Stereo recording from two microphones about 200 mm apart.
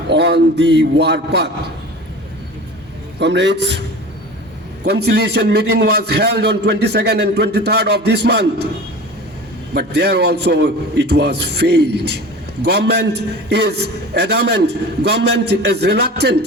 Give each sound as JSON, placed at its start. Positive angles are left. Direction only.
{"t": 0.1, "sound": "a man's voice", "side_deg": -55}
{"t": 3.2, "sound": "a man's voice", "side_deg": -60}
{"t": 9.7, "sound": "a man's voice", "side_deg": -55}